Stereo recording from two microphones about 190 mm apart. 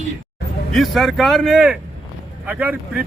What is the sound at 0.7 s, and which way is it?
Speech, centre (ahead or behind).